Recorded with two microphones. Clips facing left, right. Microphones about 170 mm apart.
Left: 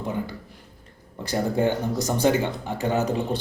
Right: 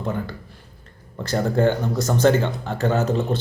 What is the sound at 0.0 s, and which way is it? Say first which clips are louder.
Speech: right 2 dB; 15° left (ahead or behind).